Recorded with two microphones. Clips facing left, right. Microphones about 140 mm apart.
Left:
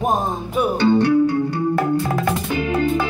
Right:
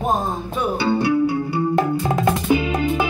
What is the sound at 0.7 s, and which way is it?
Music, 10° right (ahead or behind).